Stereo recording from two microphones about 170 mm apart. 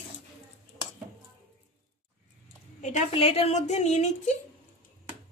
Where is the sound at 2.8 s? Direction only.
45° left (ahead or behind).